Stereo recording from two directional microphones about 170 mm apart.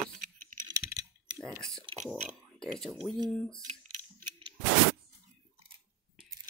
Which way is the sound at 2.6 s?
Centre (ahead or behind).